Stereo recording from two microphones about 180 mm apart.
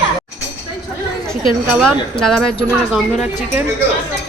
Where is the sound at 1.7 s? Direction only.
5° left (ahead or behind).